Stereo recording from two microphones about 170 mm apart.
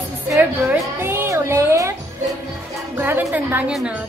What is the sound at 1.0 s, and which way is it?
Music, 15° right (ahead or behind).